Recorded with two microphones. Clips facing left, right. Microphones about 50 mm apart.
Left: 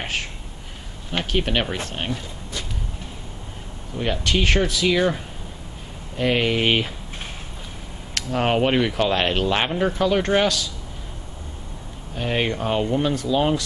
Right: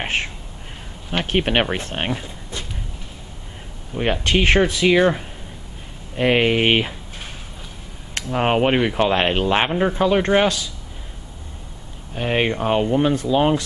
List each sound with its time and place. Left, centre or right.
0.0 s speech: right
3.9 s speech: right
8.2 s speech: right
12.2 s speech: right